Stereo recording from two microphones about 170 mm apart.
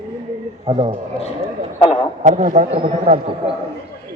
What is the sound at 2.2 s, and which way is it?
Speech, 45° right (ahead or behind).